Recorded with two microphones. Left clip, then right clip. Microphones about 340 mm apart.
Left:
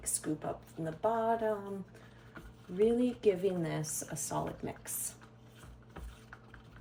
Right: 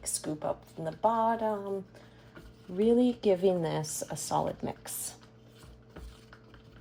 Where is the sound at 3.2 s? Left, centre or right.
Centre.